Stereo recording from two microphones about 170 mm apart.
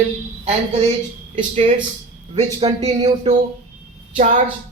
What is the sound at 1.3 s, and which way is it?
A woman's voice, 35° right (ahead or behind).